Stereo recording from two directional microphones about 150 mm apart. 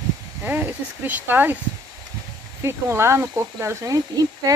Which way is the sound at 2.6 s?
15° right (ahead or behind).